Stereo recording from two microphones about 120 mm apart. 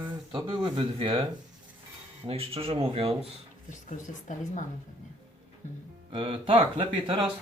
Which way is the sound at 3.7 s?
90° left.